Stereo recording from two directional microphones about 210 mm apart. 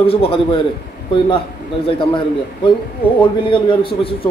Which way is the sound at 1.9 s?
25° left (ahead or behind).